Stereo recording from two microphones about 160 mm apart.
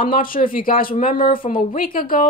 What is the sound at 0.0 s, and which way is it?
Speech, 60° left (ahead or behind).